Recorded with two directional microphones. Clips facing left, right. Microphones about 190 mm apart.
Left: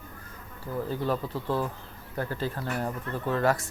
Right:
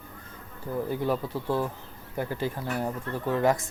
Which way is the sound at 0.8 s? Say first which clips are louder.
Right 1 dB; 15° right (ahead or behind).